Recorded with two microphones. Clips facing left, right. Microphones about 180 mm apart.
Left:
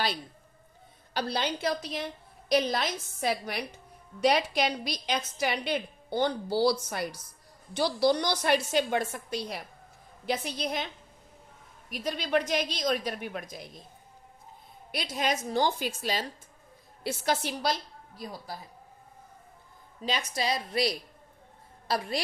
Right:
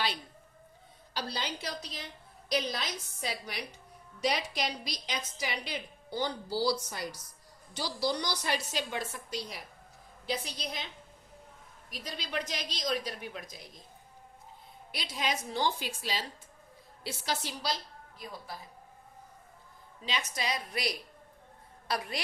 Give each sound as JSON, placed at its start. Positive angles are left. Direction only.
{"t": 1.1, "sound": "a woman's voice", "side_deg": 60}
{"t": 11.9, "sound": "a woman's voice", "side_deg": 55}
{"t": 14.9, "sound": "a woman's voice", "side_deg": 50}
{"t": 18.2, "sound": "a woman's voice", "side_deg": 40}
{"t": 20.0, "sound": "a woman's voice", "side_deg": 40}